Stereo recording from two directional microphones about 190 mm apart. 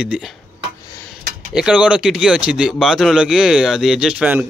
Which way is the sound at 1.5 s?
5° right (ahead or behind).